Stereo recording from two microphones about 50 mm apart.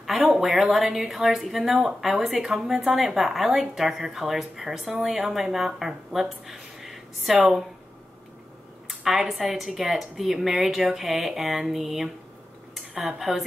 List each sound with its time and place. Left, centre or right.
0.3 s speech: centre
8.8 s speech: centre